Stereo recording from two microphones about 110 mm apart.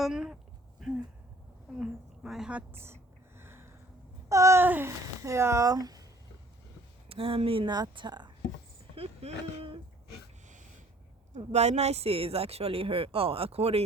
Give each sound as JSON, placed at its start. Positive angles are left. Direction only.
{"t": 0.0, "sound": "speech", "side_deg": -5}
{"t": 0.8, "sound": "a sound", "side_deg": 0}
{"t": 4.3, "sound": "speech", "side_deg": -30}
{"t": 7.1, "sound": "a woman's voice", "side_deg": -60}
{"t": 9.0, "sound": "speech", "side_deg": -55}
{"t": 11.3, "sound": "speech", "side_deg": -90}